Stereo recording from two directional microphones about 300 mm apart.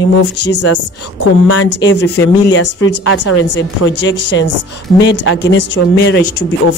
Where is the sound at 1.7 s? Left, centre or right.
Left.